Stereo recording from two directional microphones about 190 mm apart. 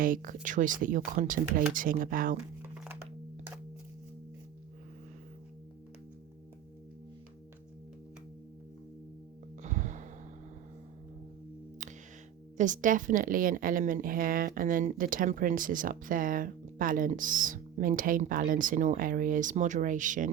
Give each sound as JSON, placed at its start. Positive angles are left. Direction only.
{"t": 0.0, "sound": "a woman's voice", "side_deg": -45}
{"t": 9.6, "sound": "gasp", "side_deg": -40}
{"t": 11.8, "sound": "music", "side_deg": -40}
{"t": 12.5, "sound": "a woman's voice", "side_deg": -40}